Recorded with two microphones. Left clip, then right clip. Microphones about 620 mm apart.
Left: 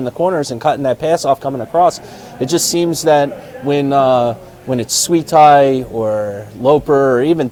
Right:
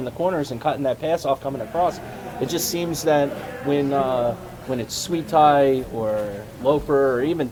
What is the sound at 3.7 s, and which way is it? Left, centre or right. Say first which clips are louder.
A man's voice: left 9 dB; left.